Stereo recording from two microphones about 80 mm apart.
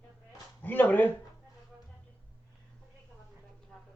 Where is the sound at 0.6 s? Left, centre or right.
Left.